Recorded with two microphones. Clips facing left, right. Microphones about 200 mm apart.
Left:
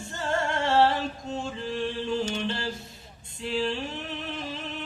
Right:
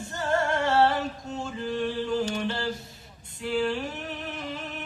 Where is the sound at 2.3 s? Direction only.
25° left (ahead or behind).